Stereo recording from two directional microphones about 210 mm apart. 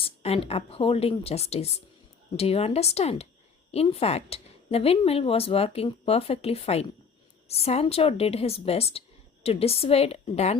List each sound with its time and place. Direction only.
0.0 s a woman's voice: 25° left (ahead or behind)